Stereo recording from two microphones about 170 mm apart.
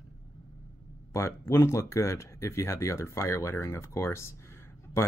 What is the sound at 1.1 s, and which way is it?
Speech, 15° left (ahead or behind).